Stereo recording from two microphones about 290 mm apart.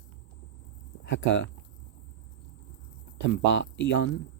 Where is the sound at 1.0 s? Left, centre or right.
Left.